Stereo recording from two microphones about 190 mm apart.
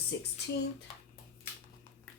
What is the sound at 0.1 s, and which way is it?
Speech, 75° left (ahead or behind).